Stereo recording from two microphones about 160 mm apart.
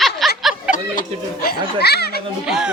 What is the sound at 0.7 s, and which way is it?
Speech, 65° left (ahead or behind).